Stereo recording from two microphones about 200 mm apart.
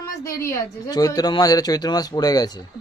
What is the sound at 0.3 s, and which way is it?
A woman's voice, 15° left (ahead or behind).